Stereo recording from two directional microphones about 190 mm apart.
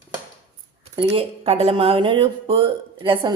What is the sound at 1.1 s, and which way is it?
Speech, 30° right (ahead or behind).